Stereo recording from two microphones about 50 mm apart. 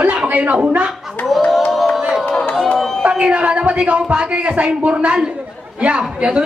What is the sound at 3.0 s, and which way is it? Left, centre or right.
A woman's voice, right.